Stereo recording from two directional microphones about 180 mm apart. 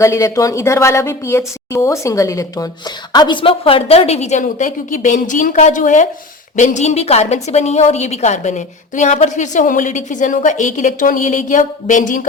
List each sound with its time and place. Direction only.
0.0 s a woman's voice: 15° left (ahead or behind); by 12.3 s 45° left (ahead or behind)